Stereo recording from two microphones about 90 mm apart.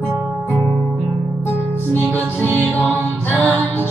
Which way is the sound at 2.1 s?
20° left (ahead or behind).